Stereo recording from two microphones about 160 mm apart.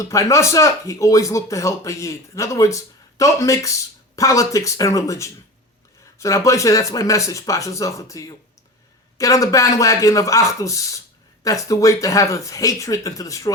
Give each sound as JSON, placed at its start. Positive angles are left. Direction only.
{"t": 0.0, "sound": "a man's voice", "side_deg": 20}